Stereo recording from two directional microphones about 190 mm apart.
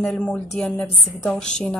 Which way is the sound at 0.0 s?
5° left (ahead or behind).